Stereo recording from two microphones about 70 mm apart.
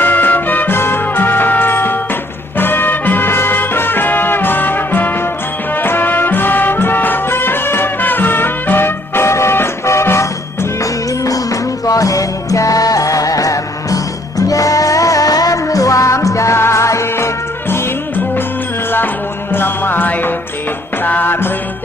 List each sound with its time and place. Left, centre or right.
0.0 s music: left
11.2 s music: left
19.5 s music: left